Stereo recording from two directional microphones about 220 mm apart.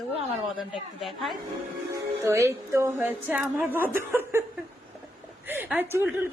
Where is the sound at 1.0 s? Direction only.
Centre (ahead or behind).